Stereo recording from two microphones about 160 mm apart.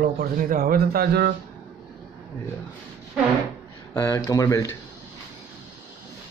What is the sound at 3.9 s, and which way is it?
Speech, 20° left (ahead or behind).